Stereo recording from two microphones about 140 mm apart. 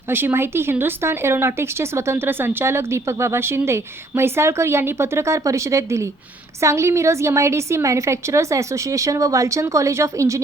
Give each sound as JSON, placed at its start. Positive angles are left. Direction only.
{"t": 0.1, "sound": "a woman's voice", "side_deg": -15}